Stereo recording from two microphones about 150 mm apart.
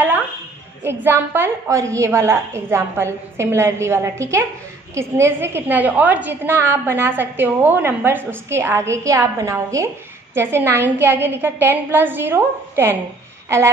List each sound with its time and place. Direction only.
0.8 s a woman's voice: 15° right (ahead or behind)